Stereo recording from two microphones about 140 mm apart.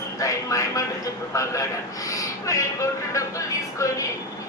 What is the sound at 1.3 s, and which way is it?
A woman's voice, 20° left (ahead or behind).